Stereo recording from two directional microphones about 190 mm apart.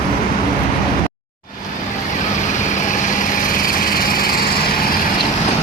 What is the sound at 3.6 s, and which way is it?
Lawn mower, 50° left (ahead or behind).